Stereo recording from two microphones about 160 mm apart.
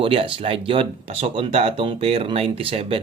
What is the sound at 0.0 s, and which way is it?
Speech, 35° right (ahead or behind).